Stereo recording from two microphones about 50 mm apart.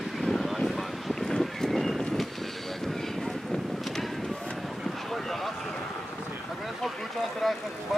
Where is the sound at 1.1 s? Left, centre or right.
Centre.